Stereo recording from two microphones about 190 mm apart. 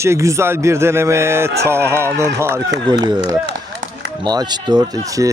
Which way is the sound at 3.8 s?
80° right.